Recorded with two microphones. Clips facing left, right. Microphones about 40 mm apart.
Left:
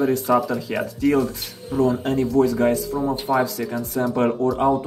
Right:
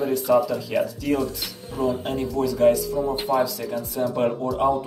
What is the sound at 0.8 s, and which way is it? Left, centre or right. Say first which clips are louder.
Speech: left 4 dB; left.